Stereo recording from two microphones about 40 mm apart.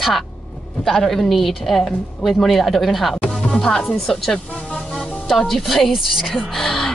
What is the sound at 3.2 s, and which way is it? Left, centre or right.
Music, centre.